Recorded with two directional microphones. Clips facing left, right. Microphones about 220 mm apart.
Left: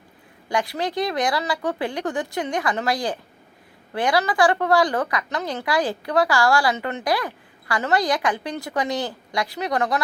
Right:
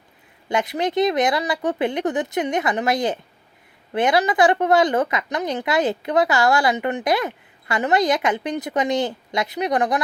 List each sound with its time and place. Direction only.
0.4 s a woman's voice: 20° right (ahead or behind)